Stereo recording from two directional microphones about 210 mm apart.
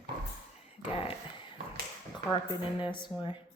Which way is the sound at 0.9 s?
25° left (ahead or behind).